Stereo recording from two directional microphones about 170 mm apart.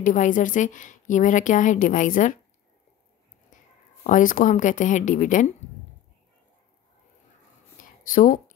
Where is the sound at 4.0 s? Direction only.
50° left (ahead or behind).